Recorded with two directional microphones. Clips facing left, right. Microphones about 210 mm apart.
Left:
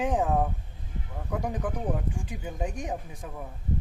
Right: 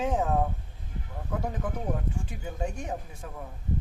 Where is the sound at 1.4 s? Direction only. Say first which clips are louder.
Left 2 dB; 15° left (ahead or behind).